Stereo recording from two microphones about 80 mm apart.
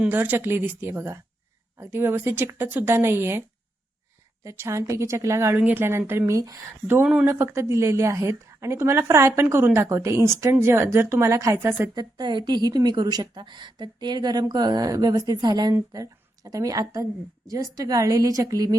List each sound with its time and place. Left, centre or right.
0.1 s speech: right
4.4 s a woman's voice: right
5.5 s a woman's voice: right
11.6 s speech: right
11.9 s speech: right
13.4 s speech: right
15.9 s a woman's voice: right